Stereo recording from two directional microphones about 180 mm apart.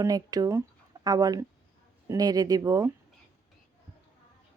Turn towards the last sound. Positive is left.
turn(degrees=-20)  # may be behind; listen again after turning